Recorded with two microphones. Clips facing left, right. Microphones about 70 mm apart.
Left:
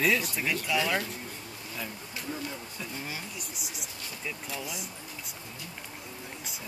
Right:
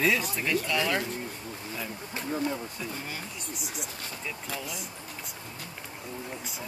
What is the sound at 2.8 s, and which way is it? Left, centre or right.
Speech, centre.